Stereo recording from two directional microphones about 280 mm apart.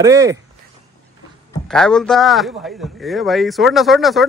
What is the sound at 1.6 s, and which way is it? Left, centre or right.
A man's voice, centre.